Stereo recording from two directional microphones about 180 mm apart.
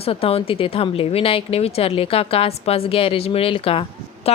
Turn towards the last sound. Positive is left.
turn(degrees=35)  # may be behind; listen again after turning